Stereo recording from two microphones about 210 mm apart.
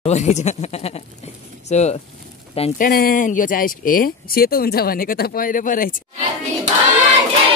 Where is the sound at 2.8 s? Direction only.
45° left (ahead or behind).